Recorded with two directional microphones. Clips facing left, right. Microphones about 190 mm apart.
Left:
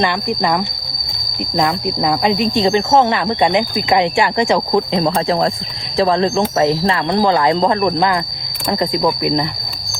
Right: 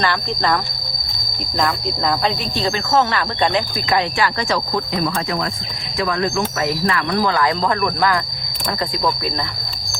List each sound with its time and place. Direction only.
0.0 s speech: 15° left (ahead or behind)